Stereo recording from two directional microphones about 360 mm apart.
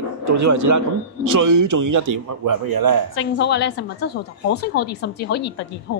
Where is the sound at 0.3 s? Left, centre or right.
Right.